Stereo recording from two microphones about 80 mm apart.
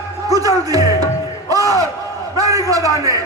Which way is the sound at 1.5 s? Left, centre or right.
Right.